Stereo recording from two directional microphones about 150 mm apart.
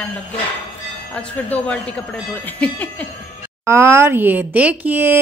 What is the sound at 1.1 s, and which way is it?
A woman's voice, 10° left (ahead or behind).